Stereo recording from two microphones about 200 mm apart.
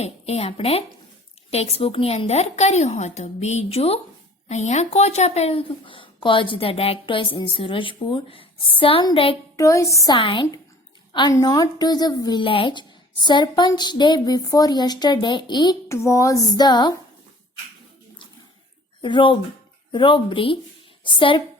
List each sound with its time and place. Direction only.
0.0 s a woman's voice: 30° left (ahead or behind)
9.6 s a woman's voice: 15° left (ahead or behind)
19.0 s speech: 25° left (ahead or behind)